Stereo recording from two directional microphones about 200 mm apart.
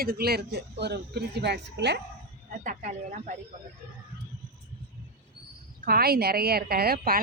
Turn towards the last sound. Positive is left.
turn(degrees=-50)  # may be behind; listen again after turning